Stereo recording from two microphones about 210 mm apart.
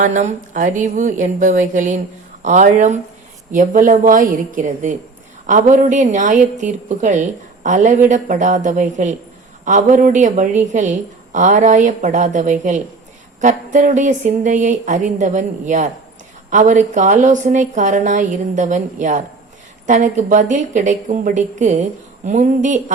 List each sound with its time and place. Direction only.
0.0 s a woman's voice: 35° right (ahead or behind)